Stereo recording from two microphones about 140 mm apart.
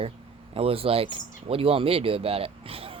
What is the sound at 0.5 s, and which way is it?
Speech, 45° right (ahead or behind).